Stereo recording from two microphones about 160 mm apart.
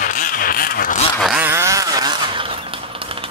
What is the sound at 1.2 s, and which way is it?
Vehicle, 5° right (ahead or behind).